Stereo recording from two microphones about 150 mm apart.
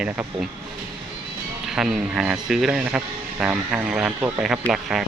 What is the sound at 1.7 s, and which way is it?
Speech, 5° right (ahead or behind).